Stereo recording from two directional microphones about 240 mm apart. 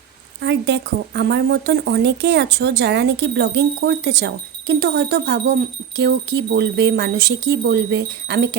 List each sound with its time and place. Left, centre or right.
0.4 s speech: right